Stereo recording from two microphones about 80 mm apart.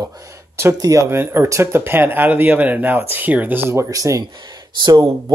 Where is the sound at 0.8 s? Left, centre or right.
Right.